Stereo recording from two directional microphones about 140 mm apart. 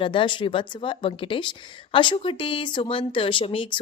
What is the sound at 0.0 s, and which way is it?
A woman's voice, 35° left (ahead or behind).